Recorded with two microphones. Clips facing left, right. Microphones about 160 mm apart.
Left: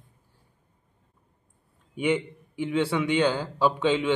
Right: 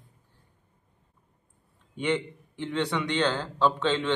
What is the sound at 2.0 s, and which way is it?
A man's voice, 10° left (ahead or behind).